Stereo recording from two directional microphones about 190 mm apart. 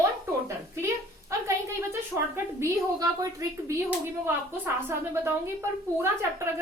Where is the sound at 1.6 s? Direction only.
15° right (ahead or behind).